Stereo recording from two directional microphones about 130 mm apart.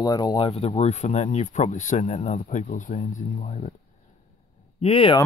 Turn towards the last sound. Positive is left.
turn(degrees=50)  # may be behind; listen again after turning